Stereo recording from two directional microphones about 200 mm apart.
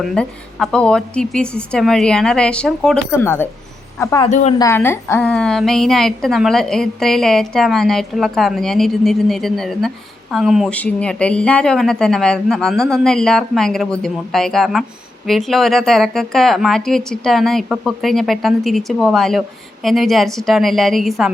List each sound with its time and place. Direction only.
0.0 s a woman's voice: centre (ahead or behind)
4.3 s a woman's voice: 35° left (ahead or behind)
4.5 s a woman's voice: 15° left (ahead or behind)